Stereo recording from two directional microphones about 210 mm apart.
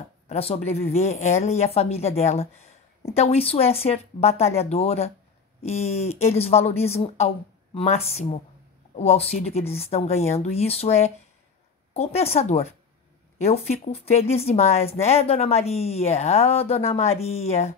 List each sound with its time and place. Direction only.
0.3 s speech: 30° left (ahead or behind)